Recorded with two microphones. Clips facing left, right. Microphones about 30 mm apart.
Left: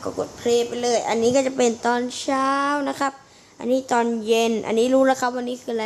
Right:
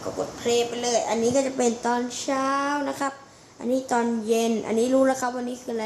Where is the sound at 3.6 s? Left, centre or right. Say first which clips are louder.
Left 4 dB; left.